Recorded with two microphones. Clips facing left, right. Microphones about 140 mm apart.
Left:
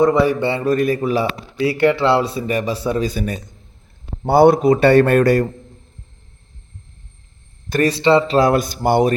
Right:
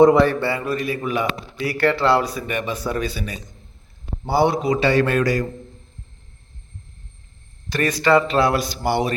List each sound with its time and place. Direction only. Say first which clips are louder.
0.2 s a man's voice: left 2 dB; 15° left (ahead or behind)
0.6 s speech: left 7 dB; 45° left (ahead or behind)
3.0 s a man's voice: left 5 dB; 45° left (ahead or behind)
7.9 s speech: left 2 dB; 25° left (ahead or behind)
8.4 s speech: left 4 dB; 45° left (ahead or behind)